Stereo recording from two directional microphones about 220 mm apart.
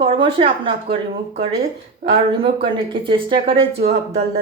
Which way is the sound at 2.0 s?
30° right (ahead or behind).